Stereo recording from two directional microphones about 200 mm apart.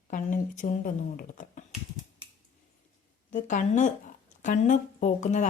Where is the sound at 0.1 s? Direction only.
40° left (ahead or behind).